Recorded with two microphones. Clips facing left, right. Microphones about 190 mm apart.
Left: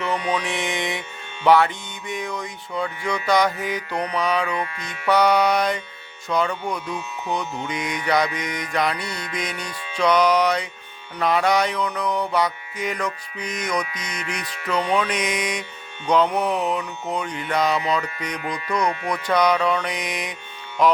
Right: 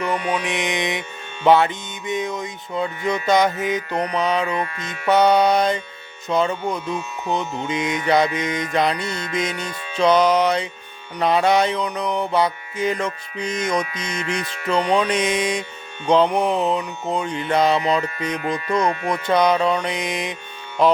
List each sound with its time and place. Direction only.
0.3 s music: 15° right (ahead or behind)
1.5 s mantra: 20° right (ahead or behind)
4.5 s music: 45° right (ahead or behind)
4.9 s mantra: 25° right (ahead or behind)
19.1 s mantra: 25° right (ahead or behind)